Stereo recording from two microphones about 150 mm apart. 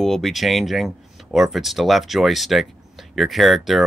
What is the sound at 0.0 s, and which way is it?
Speech, centre (ahead or behind).